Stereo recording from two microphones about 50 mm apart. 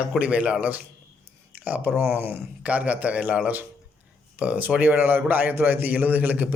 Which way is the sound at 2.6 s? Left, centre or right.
Right.